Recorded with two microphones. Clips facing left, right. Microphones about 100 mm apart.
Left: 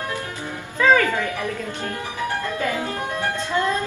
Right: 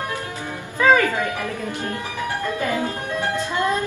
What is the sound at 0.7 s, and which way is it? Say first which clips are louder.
Music: right 1 dB; 15° right (ahead or behind).